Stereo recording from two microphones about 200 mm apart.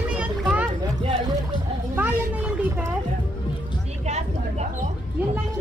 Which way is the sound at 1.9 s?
10° right (ahead or behind).